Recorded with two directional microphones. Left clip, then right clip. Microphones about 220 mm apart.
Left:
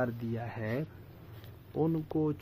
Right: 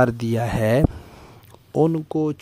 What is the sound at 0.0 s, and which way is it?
Speech, 55° right (ahead or behind).